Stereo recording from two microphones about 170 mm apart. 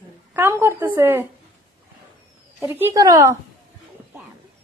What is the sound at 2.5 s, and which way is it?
Speech, 15° right (ahead or behind).